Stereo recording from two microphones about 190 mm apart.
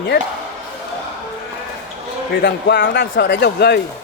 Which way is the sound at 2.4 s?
60° left (ahead or behind).